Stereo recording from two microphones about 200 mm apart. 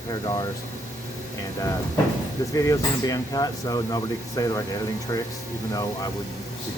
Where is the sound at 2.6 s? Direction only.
15° left (ahead or behind).